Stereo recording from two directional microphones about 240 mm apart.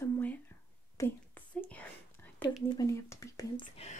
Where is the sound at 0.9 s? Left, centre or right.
Centre.